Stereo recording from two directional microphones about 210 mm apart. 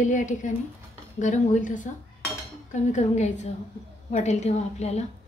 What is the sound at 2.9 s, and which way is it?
A woman's voice, 35° left (ahead or behind).